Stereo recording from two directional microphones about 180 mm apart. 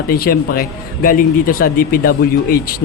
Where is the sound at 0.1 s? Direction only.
55° left (ahead or behind).